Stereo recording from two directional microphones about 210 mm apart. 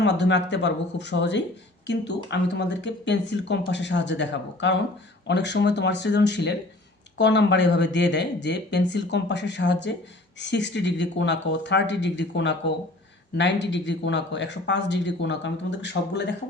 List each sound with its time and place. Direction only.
0.0 s speech: 55° left (ahead or behind)